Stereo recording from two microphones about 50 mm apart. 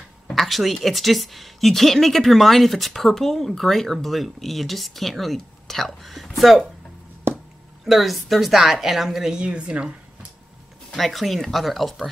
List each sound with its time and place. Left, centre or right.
0.3 s a woman's voice: centre
7.8 s a woman's voice: centre
9.4 s speech: right
11.0 s a woman's voice: centre